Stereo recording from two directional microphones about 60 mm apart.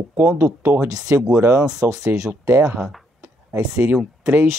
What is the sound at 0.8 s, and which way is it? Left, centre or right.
Speech, right.